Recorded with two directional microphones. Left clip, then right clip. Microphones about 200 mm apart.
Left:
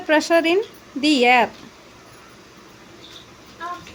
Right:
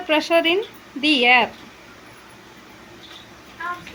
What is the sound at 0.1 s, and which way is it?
Speech, 20° left (ahead or behind).